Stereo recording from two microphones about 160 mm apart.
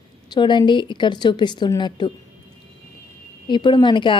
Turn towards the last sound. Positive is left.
turn(degrees=30)  # may be behind; listen again after turning